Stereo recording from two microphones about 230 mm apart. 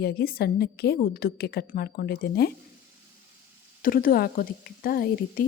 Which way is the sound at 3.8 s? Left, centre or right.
Left.